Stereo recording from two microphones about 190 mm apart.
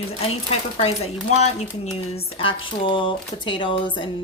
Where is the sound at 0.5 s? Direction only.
30° left (ahead or behind).